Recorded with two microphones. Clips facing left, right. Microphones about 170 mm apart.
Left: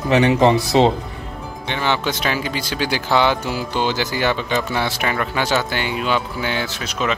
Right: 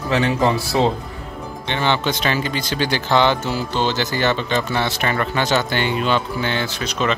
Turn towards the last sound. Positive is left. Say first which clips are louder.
# right 1 dB
turn(degrees=5)  # may be behind; listen again after turning